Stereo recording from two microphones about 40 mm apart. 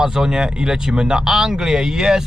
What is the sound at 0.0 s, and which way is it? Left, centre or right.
Speech, centre.